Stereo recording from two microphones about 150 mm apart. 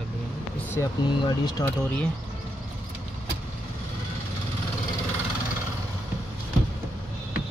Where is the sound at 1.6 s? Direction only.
10° left (ahead or behind).